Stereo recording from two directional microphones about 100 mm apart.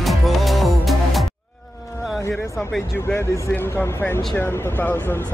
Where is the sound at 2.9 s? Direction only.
25° left (ahead or behind).